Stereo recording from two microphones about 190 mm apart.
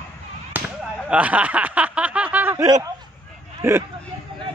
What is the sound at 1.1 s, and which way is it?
Snicker, 5° right (ahead or behind).